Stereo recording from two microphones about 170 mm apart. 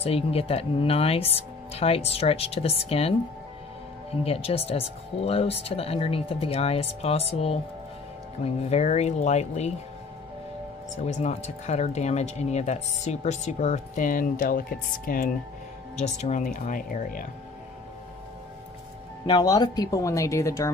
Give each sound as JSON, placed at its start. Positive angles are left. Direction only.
{"t": 0.0, "sound": "speech", "side_deg": 35}
{"t": 11.1, "sound": "speech", "side_deg": 40}
{"t": 16.0, "sound": "speech", "side_deg": 45}
{"t": 19.2, "sound": "speech", "side_deg": 25}